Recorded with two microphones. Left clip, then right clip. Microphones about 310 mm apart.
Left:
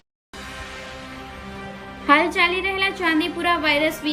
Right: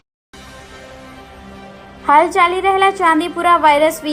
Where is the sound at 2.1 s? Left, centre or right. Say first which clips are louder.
Right 6 dB; centre.